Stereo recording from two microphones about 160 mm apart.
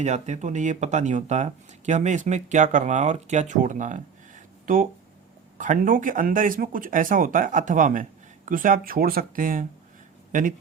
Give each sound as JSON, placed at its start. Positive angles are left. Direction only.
{"t": 0.0, "sound": "speech", "side_deg": -45}